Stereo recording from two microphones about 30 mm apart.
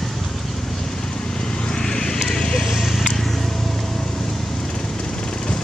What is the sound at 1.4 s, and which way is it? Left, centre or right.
Vehicle, left.